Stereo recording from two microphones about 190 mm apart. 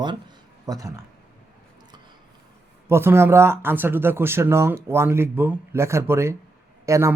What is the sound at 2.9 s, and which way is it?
Speech, 10° right (ahead or behind).